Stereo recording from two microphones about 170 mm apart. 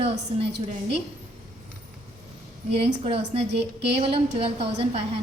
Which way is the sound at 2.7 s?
35° right (ahead or behind).